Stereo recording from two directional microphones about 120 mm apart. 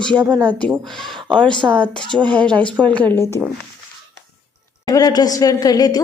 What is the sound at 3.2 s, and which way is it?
Speech, 20° left (ahead or behind).